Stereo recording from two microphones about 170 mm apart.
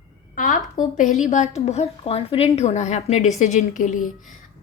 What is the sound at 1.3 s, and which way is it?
A woman's voice, 45° left (ahead or behind).